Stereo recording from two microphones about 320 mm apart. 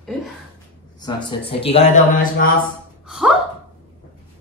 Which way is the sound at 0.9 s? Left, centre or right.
Centre.